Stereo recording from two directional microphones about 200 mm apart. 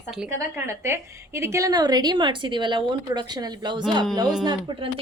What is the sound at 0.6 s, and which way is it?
A woman's voice, 15° right (ahead or behind).